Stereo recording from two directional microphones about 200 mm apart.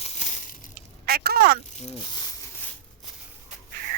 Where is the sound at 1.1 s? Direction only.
50° right (ahead or behind).